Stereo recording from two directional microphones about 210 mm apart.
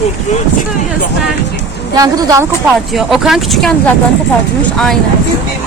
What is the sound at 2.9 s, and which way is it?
Speech, centre (ahead or behind).